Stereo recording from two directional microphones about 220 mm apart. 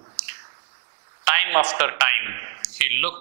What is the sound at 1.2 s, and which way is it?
A man's voice, 15° right (ahead or behind).